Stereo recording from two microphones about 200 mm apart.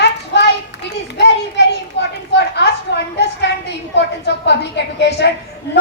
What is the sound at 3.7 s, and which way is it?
A woman's voice, 60° left (ahead or behind).